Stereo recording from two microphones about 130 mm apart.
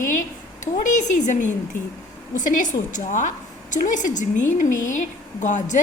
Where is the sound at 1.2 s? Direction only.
70° left (ahead or behind).